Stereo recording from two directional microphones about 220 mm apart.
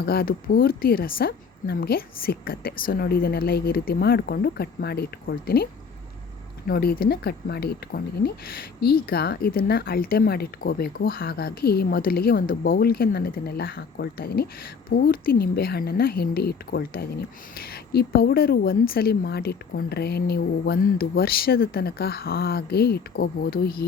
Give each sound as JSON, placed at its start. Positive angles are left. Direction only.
{"t": 0.0, "sound": "speech", "side_deg": 45}
{"t": 6.7, "sound": "speech", "side_deg": 45}